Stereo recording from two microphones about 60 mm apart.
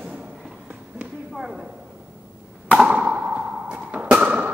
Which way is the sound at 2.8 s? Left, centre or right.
Centre.